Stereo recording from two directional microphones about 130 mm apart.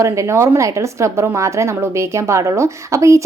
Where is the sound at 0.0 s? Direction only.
20° right (ahead or behind).